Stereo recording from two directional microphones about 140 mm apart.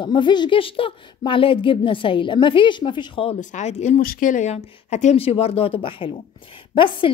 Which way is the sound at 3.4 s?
55° left (ahead or behind).